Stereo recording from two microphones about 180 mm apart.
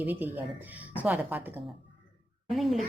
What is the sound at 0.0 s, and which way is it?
A woman's voice, 10° right (ahead or behind).